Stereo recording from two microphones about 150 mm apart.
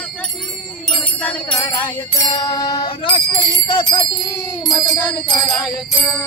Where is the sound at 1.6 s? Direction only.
20° left (ahead or behind).